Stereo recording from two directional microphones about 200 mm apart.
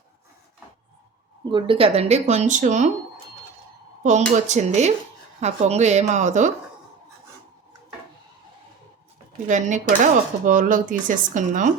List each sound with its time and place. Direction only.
1.5 s speech: 25° right (ahead or behind)
4.4 s speech: 35° right (ahead or behind)
9.5 s speech: 40° right (ahead or behind)